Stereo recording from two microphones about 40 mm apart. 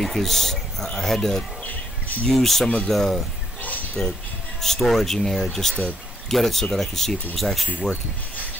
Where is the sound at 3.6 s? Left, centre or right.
Left.